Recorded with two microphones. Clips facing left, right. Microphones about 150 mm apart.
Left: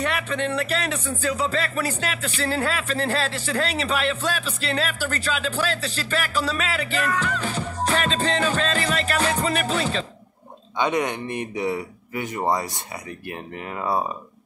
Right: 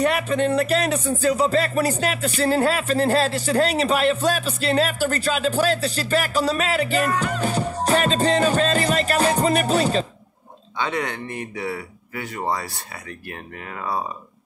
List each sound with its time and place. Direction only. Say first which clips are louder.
0.0 s music: right 5 dB; 40° right (ahead or behind)
10.8 s speech: left 3 dB; 20° left (ahead or behind)